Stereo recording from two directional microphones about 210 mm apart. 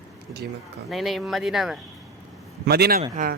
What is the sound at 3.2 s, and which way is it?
Speech, 35° right (ahead or behind).